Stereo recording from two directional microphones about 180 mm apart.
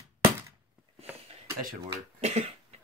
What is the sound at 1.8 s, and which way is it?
Speech, 35° right (ahead or behind).